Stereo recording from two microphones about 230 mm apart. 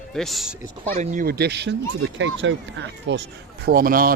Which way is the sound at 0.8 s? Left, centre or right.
Right.